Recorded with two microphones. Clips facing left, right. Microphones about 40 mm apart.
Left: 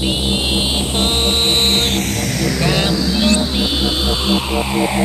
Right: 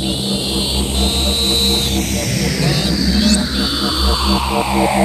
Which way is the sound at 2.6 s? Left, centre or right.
Left.